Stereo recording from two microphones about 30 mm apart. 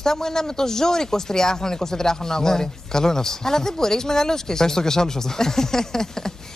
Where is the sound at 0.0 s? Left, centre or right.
Centre.